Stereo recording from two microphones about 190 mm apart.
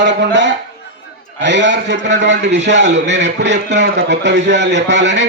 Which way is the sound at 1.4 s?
70° right (ahead or behind).